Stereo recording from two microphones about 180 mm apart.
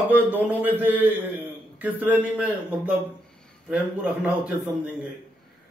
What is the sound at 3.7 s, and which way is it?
Speech, 5° right (ahead or behind).